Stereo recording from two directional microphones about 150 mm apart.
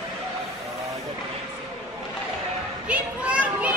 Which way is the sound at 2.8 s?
10° right (ahead or behind).